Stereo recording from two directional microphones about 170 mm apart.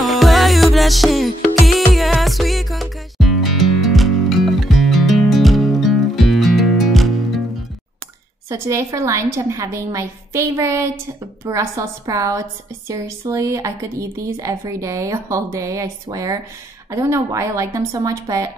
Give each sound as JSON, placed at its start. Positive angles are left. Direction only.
{"t": 0.0, "sound": "music", "side_deg": 0}
{"t": 8.5, "sound": "a woman's voice", "side_deg": -20}